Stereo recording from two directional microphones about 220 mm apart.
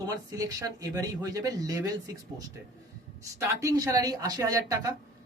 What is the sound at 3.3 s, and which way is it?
Speech, 15° right (ahead or behind).